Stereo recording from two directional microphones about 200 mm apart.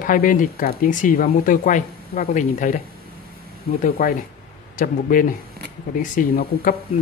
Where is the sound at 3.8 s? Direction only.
45° left (ahead or behind).